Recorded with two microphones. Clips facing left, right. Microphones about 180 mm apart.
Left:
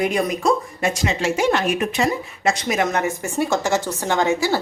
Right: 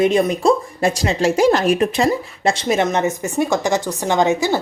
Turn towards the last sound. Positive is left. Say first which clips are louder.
# right 3 dB
turn(degrees=-20)  # may be behind; listen again after turning